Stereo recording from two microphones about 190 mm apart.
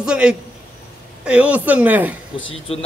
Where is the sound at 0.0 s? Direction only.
5° right (ahead or behind).